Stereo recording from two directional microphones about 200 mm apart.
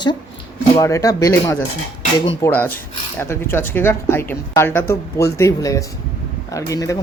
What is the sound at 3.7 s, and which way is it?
Speech, 10° left (ahead or behind).